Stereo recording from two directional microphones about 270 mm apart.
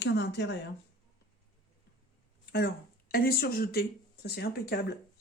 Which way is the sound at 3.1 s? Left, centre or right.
Left.